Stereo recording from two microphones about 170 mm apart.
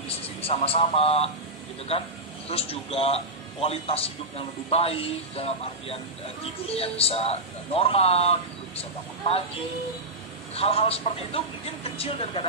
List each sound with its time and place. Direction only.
0.4 s a man's voice: 35° left (ahead or behind)
10.5 s a man's voice: 35° left (ahead or behind)